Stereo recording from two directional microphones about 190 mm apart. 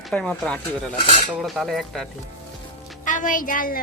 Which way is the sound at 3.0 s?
45° left (ahead or behind).